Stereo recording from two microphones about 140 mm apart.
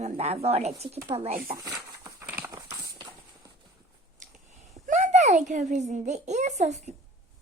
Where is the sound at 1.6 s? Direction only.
25° right (ahead or behind).